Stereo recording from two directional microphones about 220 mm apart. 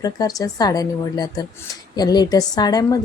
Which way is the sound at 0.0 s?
15° left (ahead or behind).